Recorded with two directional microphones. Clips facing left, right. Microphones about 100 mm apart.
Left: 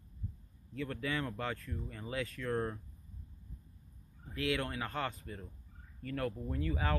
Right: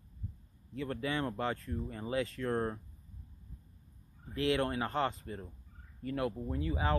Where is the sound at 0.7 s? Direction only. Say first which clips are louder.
Right 2 dB; 25° right (ahead or behind).